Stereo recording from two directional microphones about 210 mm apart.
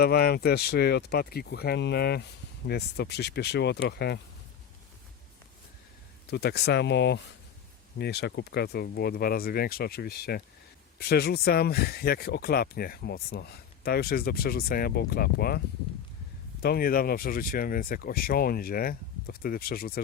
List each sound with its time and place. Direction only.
0.0 s speech: 50° left (ahead or behind)
6.3 s speech: 50° left (ahead or behind)
16.6 s speech: 45° left (ahead or behind)